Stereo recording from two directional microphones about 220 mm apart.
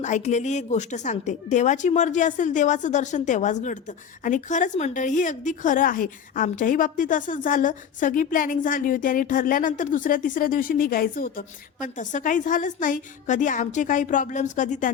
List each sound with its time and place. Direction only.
0.0 s a woman's voice: 30° left (ahead or behind)